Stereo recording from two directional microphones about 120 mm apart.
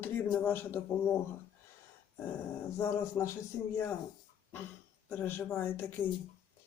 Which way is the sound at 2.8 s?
25° left (ahead or behind).